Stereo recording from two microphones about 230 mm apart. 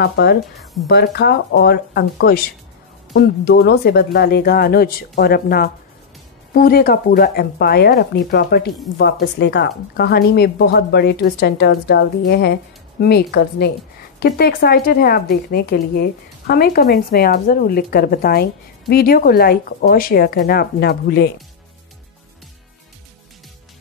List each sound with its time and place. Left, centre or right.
0.0 s speech: left